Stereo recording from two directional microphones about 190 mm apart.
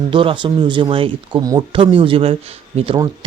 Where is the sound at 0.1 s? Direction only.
25° right (ahead or behind).